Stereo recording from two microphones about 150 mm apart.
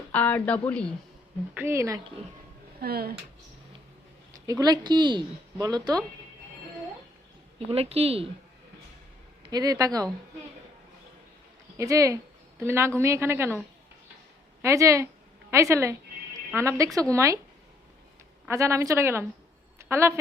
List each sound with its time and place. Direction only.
0.1 s a woman's voice: 10° left (ahead or behind)
1.5 s a woman's voice: 20° right (ahead or behind)
2.8 s speech: 90° right
4.4 s a woman's voice: 25° right (ahead or behind)
7.7 s a woman's voice: 40° right (ahead or behind)
9.4 s a woman's voice: 25° right (ahead or behind)
11.8 s a woman's voice: 20° right (ahead or behind)
14.6 s a woman's voice: 20° right (ahead or behind)
18.4 s a woman's voice: 20° right (ahead or behind)